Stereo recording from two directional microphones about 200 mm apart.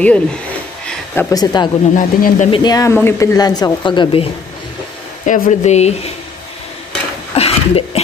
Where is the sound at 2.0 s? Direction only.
40° left (ahead or behind).